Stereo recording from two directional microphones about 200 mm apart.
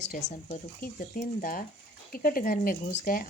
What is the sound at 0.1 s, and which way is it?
Speech, 45° left (ahead or behind).